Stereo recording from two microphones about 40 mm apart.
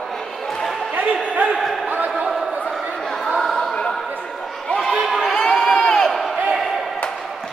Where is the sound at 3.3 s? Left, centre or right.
Centre.